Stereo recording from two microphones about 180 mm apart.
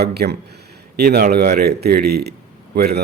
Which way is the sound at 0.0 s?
65° right (ahead or behind).